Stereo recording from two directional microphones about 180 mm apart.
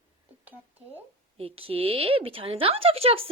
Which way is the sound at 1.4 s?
30° right (ahead or behind).